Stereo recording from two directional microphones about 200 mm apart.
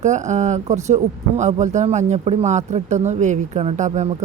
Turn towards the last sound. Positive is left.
turn(degrees=-35)  # may be behind; listen again after turning